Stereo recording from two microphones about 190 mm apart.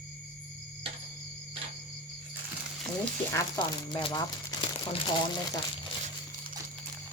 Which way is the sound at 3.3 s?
20° left (ahead or behind).